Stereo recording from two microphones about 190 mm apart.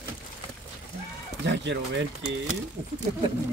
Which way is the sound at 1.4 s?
70° right (ahead or behind).